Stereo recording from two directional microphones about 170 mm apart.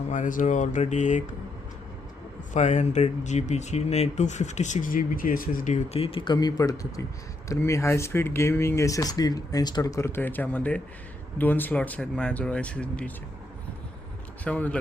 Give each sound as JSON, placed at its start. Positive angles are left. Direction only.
{"t": 0.1, "sound": "speech", "side_deg": 50}
{"t": 2.5, "sound": "speech", "side_deg": 45}
{"t": 14.4, "sound": "speech", "side_deg": 10}